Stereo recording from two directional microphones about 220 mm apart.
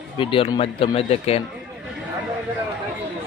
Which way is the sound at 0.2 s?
25° left (ahead or behind).